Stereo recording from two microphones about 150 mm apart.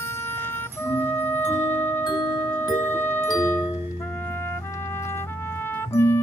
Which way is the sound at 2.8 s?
15° left (ahead or behind).